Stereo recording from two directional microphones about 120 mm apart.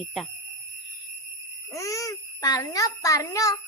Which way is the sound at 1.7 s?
25° left (ahead or behind).